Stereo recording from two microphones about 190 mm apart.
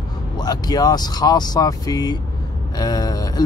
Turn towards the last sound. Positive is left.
turn(degrees=20)  # may be behind; listen again after turning